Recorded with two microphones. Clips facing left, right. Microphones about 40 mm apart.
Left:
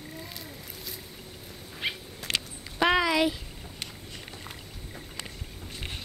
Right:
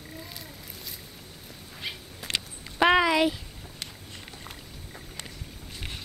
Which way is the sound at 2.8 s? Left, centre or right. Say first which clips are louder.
Right 3 dB; centre.